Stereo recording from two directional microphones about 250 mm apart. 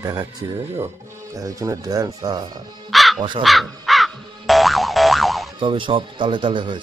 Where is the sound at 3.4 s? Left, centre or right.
Centre.